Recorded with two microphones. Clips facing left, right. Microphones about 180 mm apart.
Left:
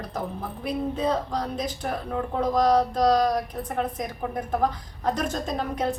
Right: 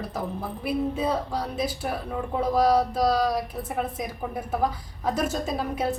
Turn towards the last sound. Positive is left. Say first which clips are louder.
# even
turn(degrees=-5)  # may be behind; listen again after turning